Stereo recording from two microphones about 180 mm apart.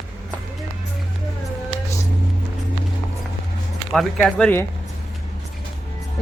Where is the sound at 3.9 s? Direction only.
5° left (ahead or behind).